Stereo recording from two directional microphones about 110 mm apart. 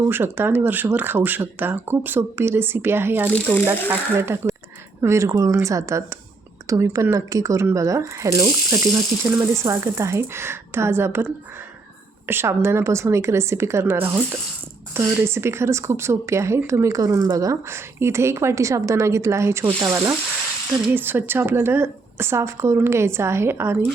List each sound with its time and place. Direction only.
0.1 s speech: 20° right (ahead or behind)
3.3 s speech: 15° left (ahead or behind)
3.8 s speech: 20° right (ahead or behind)
20.9 s speech: 20° right (ahead or behind)